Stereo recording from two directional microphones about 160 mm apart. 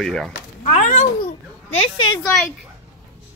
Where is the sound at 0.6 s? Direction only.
50° left (ahead or behind).